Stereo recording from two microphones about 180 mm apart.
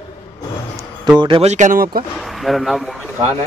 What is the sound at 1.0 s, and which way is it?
Speech, 25° right (ahead or behind).